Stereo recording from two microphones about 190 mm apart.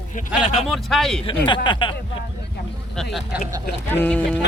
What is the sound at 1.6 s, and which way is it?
Speech, 25° left (ahead or behind).